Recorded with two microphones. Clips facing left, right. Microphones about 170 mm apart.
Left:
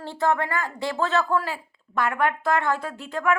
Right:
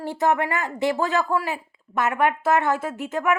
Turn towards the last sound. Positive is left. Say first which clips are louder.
# right 1 dB
turn(degrees=-20)  # may be behind; listen again after turning